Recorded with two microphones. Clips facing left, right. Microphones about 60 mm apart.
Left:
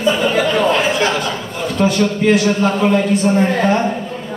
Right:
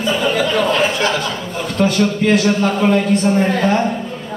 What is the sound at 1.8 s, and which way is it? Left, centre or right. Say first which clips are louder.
A man's voice: even; centre.